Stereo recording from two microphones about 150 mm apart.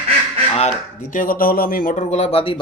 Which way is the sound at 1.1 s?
70° left (ahead or behind).